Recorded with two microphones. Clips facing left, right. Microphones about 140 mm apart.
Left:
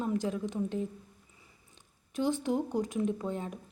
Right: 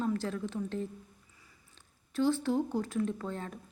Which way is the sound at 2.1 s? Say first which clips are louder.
Right 1 dB; 15° left (ahead or behind).